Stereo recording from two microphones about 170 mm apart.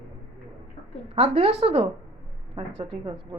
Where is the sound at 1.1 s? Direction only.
35° right (ahead or behind).